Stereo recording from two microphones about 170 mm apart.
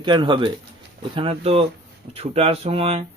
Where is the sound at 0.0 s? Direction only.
30° right (ahead or behind).